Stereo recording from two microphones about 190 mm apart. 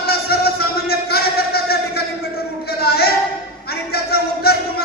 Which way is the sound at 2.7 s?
55° left (ahead or behind).